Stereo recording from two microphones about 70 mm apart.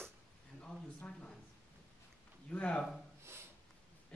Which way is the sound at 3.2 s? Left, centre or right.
Right.